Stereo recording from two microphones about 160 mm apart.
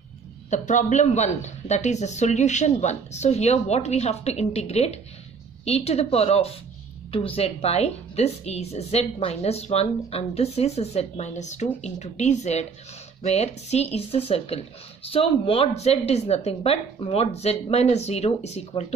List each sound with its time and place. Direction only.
0.5 s a woman's voice: 50° left (ahead or behind)